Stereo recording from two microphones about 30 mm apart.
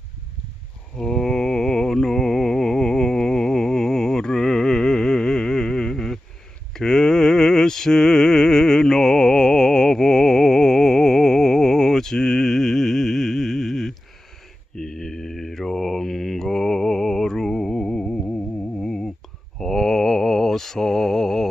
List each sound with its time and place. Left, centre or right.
0.9 s music: centre
6.7 s mantra: left
17.7 s music: left
18.8 s a sound: left
19.6 s mantra: centre